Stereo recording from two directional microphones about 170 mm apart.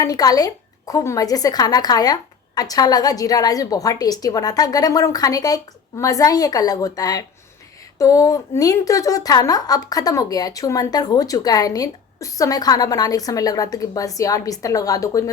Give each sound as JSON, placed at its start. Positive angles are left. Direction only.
{"t": 0.0, "sound": "a woman's voice", "side_deg": 20}